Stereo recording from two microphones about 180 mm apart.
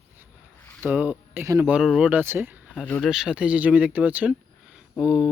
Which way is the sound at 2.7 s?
5° left (ahead or behind).